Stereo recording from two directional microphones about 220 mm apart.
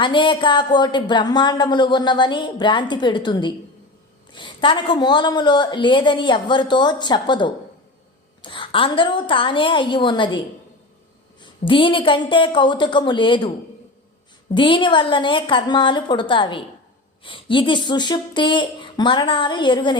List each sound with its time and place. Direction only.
0.0 s a woman's voice: 20° left (ahead or behind)
11.4 s a woman's voice: 25° left (ahead or behind)
14.5 s a woman's voice: 20° left (ahead or behind)